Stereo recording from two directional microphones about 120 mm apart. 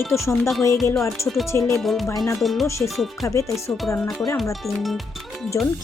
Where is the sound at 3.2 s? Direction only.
25° left (ahead or behind).